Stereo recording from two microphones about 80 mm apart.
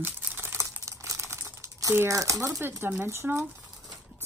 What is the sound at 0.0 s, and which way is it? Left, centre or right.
Typewriter, right.